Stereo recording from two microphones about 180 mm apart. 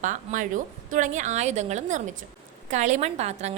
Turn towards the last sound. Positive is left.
turn(degrees=-40)  # may be behind; listen again after turning